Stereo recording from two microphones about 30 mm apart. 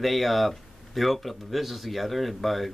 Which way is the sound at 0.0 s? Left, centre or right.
Centre.